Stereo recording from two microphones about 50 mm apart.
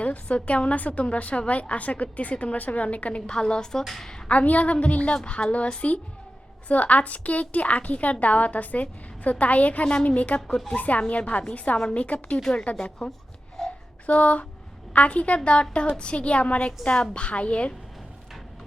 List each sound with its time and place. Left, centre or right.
0.0 s a woman's voice: left; by 4.1 s centre
4.3 s a woman's voice: left
9.8 s a woman's voice: centre
11.8 s a woman's voice: centre
12.0 s a woman's voice: left
12.4 s a woman's voice: centre
13.6 s a sound: centre
14.1 s a woman's voice: left